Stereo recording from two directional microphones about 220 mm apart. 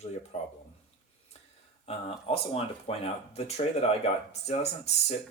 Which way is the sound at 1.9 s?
25° left (ahead or behind).